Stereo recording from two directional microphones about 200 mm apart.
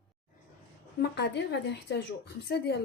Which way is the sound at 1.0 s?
55° left (ahead or behind).